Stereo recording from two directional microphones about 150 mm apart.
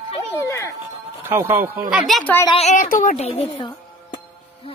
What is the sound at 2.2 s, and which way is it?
Speech, 15° left (ahead or behind).